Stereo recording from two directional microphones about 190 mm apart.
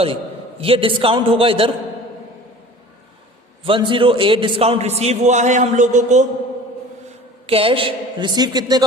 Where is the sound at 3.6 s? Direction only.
25° right (ahead or behind).